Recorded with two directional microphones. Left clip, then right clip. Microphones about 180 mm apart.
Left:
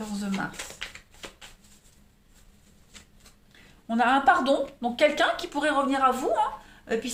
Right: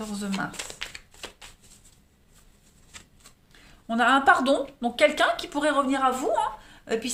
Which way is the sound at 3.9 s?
30° right (ahead or behind).